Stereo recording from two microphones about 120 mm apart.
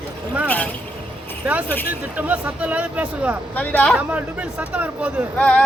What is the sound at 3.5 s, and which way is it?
Speech, 15° left (ahead or behind).